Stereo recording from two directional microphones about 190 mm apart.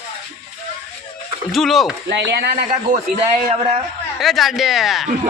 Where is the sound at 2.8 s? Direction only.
40° right (ahead or behind).